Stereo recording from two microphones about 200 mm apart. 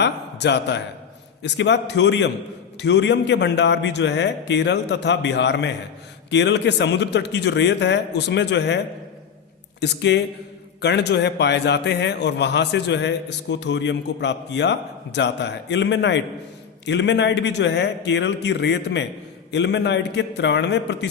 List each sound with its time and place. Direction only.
0.0 s a man's voice: 60° left (ahead or behind)
9.8 s a man's voice: 60° left (ahead or behind)